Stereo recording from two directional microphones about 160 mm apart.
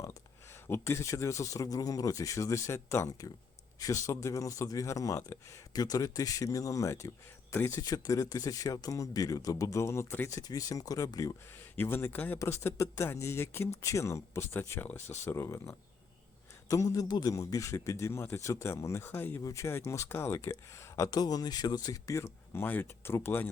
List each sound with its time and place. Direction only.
0.5 s speech: 15° left (ahead or behind)